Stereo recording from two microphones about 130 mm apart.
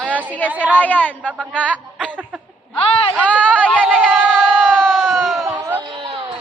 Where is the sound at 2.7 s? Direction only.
45° left (ahead or behind).